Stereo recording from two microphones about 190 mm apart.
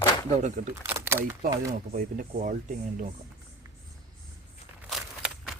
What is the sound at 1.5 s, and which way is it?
Speech, 15° right (ahead or behind).